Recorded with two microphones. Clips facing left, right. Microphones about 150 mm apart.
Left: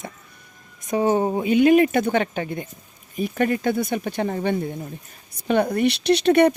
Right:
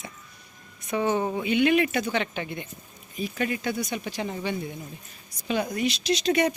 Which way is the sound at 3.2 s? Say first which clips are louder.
Left 7 dB; 55° left (ahead or behind).